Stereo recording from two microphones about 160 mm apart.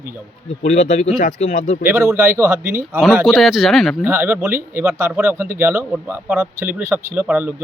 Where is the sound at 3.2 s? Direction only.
Centre (ahead or behind).